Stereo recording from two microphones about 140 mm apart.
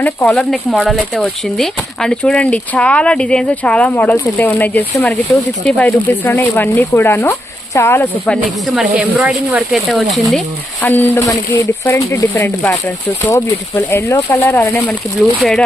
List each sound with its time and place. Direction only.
0.0 s speech: 10° left (ahead or behind)
8.6 s speech: 5° right (ahead or behind)
10.8 s speech: 15° left (ahead or behind)
15.4 s speech: 5° left (ahead or behind)